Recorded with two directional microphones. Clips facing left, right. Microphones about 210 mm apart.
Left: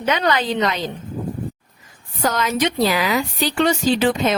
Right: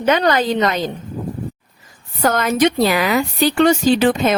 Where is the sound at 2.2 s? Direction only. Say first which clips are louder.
Right 5 dB; 55° right (ahead or behind).